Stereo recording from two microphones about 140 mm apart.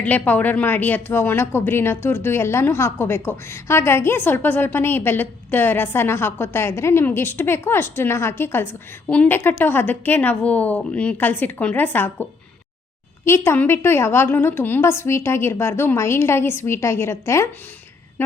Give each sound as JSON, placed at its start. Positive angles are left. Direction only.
{"t": 0.0, "sound": "a woman's voice", "side_deg": 10}